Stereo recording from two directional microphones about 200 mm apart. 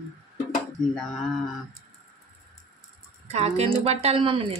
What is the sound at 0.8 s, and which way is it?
Speech, 5° left (ahead or behind).